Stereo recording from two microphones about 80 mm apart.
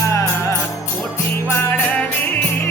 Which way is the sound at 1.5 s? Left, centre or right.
Left.